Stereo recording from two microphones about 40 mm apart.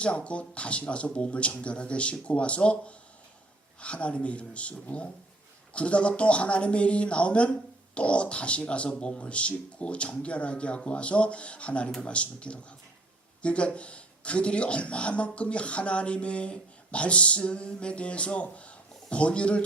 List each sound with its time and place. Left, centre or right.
0.0 s speech: left